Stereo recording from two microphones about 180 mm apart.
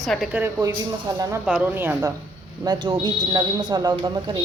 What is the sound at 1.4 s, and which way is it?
Speech, 5° right (ahead or behind).